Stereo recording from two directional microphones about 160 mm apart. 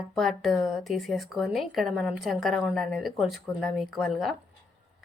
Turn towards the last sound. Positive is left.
turn(degrees=0)  # may be behind; listen again after turning